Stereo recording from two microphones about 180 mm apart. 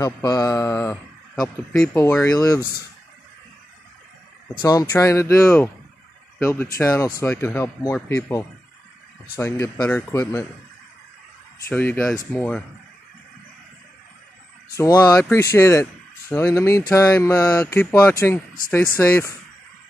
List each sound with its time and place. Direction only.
0.0 s speech: 20° left (ahead or behind)
4.6 s speech: 20° left (ahead or behind)
11.6 s speech: 10° left (ahead or behind)
14.8 s speech: 15° left (ahead or behind)